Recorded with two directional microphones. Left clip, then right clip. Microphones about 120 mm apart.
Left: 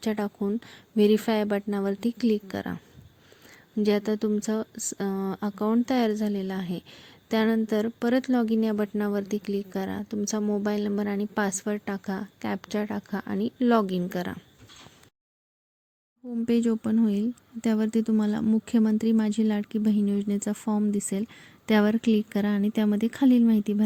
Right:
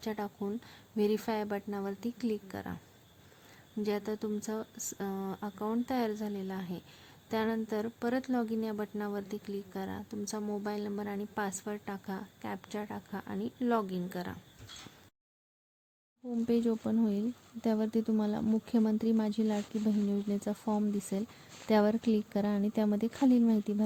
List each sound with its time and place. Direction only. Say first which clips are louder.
0.0 s speech: left 8 dB; 30° left (ahead or behind)
3.8 s speech: left 9 dB; 30° left (ahead or behind)
16.5 s speech: left 6 dB; 20° left (ahead or behind)